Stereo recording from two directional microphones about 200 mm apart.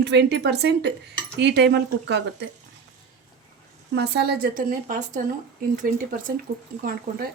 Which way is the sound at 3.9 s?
55° right (ahead or behind).